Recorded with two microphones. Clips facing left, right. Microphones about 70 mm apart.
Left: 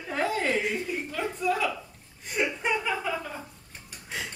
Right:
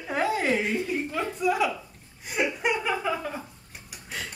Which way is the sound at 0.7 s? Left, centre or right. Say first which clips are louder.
Right 3 dB; centre.